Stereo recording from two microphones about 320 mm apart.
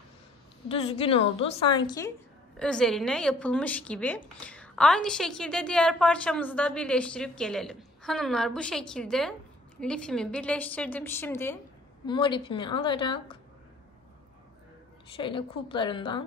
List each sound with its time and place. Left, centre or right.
0.7 s a woman's voice: centre
15.1 s a woman's voice: centre